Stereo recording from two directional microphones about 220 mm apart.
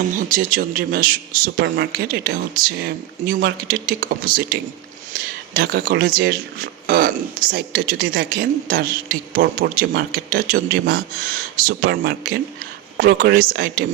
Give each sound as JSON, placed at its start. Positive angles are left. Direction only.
{"t": 0.2, "sound": "speech", "side_deg": -40}